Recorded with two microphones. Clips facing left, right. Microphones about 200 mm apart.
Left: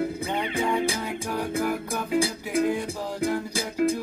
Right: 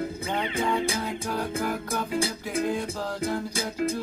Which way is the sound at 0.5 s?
15° left (ahead or behind).